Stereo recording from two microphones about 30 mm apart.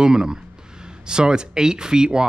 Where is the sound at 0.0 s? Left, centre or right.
Right.